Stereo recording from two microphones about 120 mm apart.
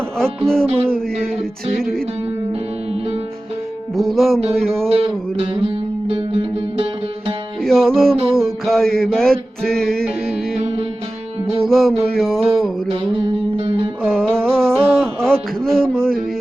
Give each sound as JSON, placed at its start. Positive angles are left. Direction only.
{"t": 0.2, "sound": "music", "side_deg": 5}
{"t": 3.9, "sound": "music", "side_deg": 0}
{"t": 4.9, "sound": "music", "side_deg": -50}
{"t": 7.6, "sound": "music", "side_deg": 5}
{"t": 11.6, "sound": "music", "side_deg": 0}
{"t": 12.9, "sound": "music", "side_deg": -50}
{"t": 14.0, "sound": "music", "side_deg": 5}